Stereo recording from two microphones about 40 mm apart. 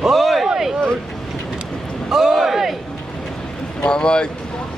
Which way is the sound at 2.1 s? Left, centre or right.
Centre.